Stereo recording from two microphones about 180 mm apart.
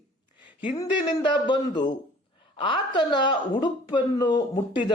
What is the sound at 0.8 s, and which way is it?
Speech, 25° left (ahead or behind).